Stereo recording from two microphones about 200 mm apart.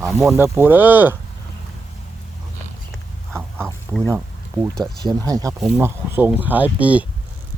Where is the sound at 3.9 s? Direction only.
15° right (ahead or behind).